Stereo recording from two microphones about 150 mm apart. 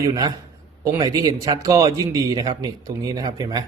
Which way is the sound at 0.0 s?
25° right (ahead or behind).